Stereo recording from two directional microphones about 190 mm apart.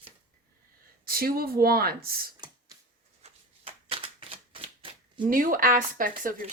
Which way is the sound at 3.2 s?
30° right (ahead or behind).